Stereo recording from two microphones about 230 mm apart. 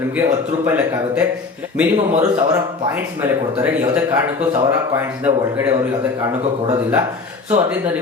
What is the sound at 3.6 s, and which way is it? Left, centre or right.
Speech, centre.